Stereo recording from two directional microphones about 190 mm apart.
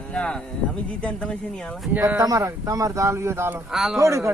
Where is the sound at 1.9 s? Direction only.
10° right (ahead or behind).